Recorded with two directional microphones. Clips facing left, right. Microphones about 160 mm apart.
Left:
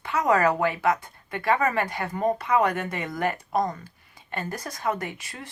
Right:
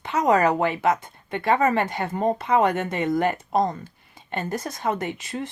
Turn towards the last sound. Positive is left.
turn(degrees=-25)  # may be behind; listen again after turning